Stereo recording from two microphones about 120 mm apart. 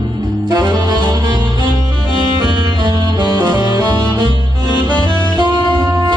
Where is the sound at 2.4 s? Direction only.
35° right (ahead or behind).